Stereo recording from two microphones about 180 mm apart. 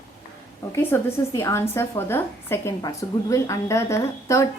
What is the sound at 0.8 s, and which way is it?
A woman's voice, 15° left (ahead or behind).